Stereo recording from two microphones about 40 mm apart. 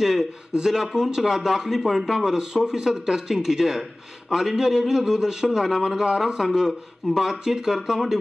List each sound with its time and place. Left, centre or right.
0.0 s a man's voice: centre